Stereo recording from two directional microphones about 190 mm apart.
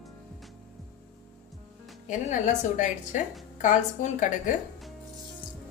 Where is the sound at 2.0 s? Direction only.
40° left (ahead or behind).